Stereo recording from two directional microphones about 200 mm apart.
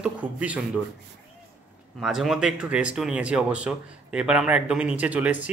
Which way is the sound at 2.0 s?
Centre (ahead or behind).